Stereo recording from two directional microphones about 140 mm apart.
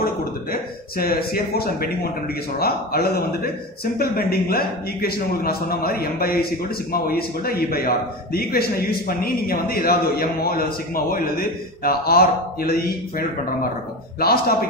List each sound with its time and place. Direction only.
0.0 s a sound: 90° left
2.6 s a man's voice: 90° left
14.2 s a man's voice: 90° left